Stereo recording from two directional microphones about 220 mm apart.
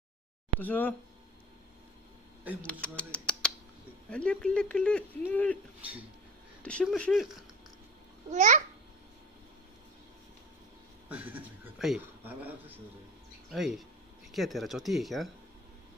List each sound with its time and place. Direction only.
0.6 s speech: 10° left (ahead or behind)
2.6 s speech: 5° left (ahead or behind)
6.6 s speech: 5° left (ahead or behind)
8.3 s a child's voice: 35° right (ahead or behind)
11.1 s speech: 5° right (ahead or behind)